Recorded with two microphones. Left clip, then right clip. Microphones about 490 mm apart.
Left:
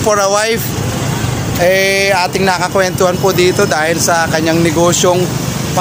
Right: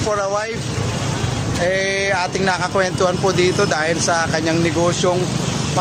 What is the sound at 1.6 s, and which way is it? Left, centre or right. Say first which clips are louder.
Speech: left 8 dB; right.